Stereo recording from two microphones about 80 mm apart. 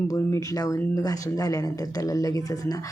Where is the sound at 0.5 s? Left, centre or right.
Left.